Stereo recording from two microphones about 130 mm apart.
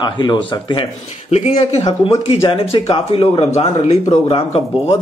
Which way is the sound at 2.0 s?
45° left (ahead or behind).